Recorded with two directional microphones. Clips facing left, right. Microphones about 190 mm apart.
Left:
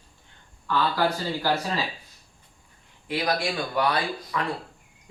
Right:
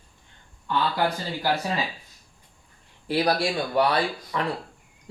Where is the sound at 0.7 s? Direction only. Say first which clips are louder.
Even; 20° right (ahead or behind).